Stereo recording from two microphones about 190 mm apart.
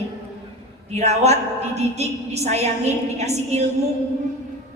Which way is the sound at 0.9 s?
35° right (ahead or behind).